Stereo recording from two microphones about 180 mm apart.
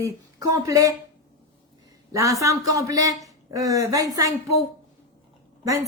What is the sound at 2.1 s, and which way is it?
A woman's voice, 20° right (ahead or behind).